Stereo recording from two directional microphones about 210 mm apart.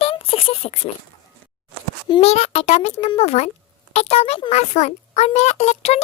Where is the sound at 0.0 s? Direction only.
25° left (ahead or behind).